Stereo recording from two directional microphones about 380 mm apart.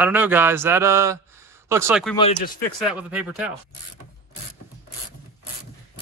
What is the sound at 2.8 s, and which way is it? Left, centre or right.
Speech, centre.